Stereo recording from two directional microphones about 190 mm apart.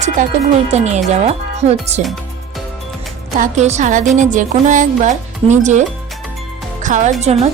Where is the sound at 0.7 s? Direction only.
35° right (ahead or behind).